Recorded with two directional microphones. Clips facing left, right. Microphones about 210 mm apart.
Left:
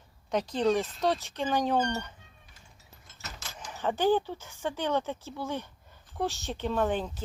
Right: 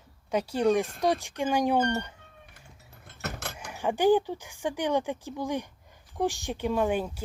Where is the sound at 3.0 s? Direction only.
60° right (ahead or behind).